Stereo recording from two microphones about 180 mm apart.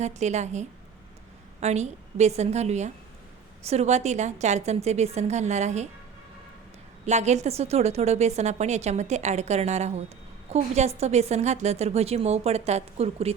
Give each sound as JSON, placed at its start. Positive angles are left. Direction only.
{"t": 0.0, "sound": "a woman's voice", "side_deg": -40}
{"t": 7.0, "sound": "a woman's voice", "side_deg": -40}